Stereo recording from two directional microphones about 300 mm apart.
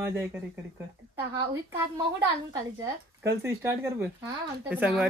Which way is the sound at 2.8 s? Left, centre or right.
Centre.